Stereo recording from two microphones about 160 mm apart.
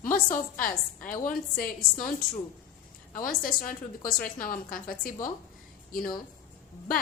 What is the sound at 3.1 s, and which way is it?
A woman's voice, 60° left (ahead or behind).